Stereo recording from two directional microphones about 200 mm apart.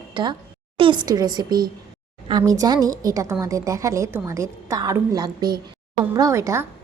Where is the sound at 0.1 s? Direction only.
20° right (ahead or behind).